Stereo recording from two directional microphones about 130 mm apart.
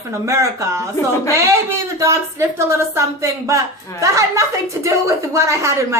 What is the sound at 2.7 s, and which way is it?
A woman's voice, 20° right (ahead or behind).